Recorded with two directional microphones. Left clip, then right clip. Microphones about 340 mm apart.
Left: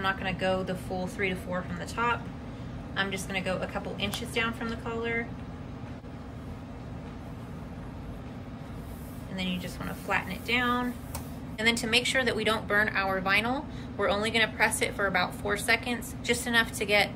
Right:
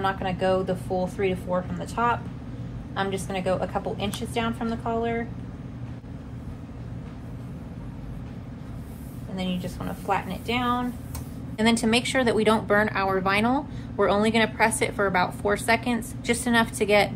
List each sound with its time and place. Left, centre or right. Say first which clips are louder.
0.0 s speech: right 4 dB; centre
9.4 s speech: right 3 dB; centre